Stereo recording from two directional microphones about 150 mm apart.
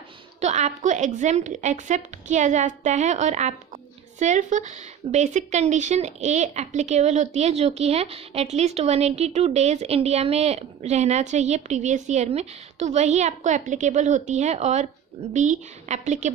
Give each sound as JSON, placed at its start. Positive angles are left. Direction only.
{"t": 0.4, "sound": "speech", "side_deg": -50}